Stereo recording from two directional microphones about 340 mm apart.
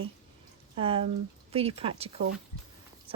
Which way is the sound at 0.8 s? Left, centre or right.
Centre.